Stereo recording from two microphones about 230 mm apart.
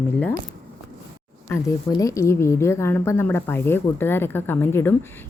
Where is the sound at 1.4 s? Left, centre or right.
Centre.